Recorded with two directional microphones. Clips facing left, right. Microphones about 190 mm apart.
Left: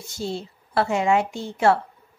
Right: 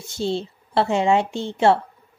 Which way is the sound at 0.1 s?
25° right (ahead or behind).